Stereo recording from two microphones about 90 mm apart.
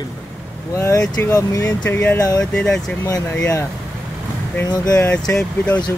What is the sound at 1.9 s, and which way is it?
Speech, 25° left (ahead or behind).